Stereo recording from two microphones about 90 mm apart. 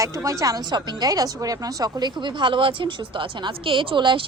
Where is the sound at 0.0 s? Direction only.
35° right (ahead or behind).